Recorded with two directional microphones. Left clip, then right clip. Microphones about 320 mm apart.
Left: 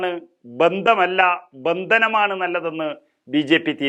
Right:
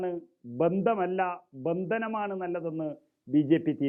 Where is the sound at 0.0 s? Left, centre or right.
Centre.